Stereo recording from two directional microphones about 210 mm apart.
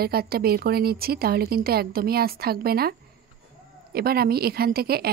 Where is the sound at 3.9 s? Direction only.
45° right (ahead or behind).